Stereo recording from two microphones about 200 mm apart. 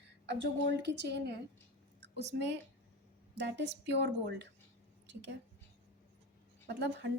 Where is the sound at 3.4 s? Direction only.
60° right (ahead or behind).